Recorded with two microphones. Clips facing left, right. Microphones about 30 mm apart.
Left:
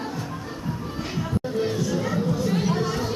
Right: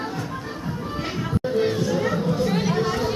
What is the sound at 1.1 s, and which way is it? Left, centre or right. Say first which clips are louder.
Music: right 3 dB; right.